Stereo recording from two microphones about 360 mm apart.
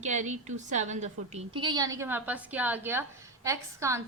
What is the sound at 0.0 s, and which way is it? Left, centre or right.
A woman's voice, centre.